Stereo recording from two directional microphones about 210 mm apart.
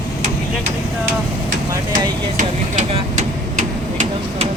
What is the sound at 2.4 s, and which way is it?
Speech, 30° right (ahead or behind).